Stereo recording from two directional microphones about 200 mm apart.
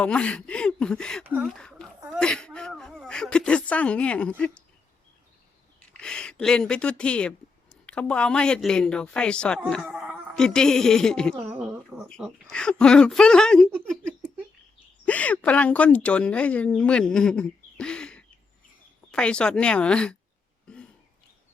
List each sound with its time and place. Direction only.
0.0 s speech: 5° left (ahead or behind)
5.8 s a woman's voice: 5° left (ahead or behind)
15.0 s speech: 5° left (ahead or behind)